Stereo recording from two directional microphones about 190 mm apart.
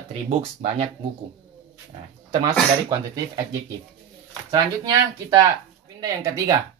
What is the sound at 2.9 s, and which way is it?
Speech, 20° right (ahead or behind).